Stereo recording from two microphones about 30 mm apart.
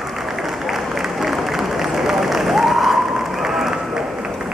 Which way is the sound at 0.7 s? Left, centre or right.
Centre.